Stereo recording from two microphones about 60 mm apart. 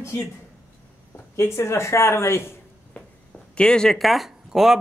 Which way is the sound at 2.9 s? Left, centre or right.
Left.